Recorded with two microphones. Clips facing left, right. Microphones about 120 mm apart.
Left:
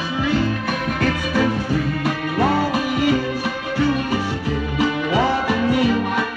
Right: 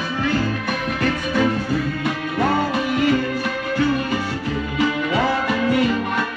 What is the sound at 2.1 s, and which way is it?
Music, centre (ahead or behind).